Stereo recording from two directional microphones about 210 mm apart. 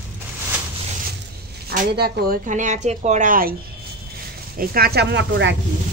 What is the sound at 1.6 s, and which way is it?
A woman's voice, 50° right (ahead or behind).